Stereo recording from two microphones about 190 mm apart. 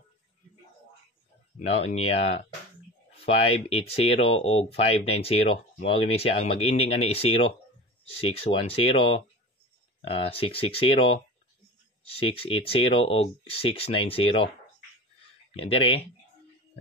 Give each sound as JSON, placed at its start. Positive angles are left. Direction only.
{"t": 1.6, "sound": "speech", "side_deg": 35}
{"t": 15.5, "sound": "speech", "side_deg": 30}